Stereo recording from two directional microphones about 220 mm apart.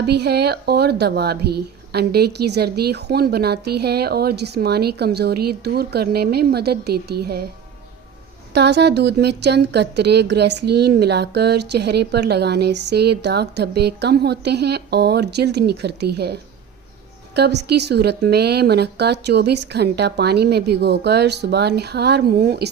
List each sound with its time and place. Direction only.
0.0 s a woman's voice: 50° right (ahead or behind)
8.5 s a woman's voice: 50° right (ahead or behind)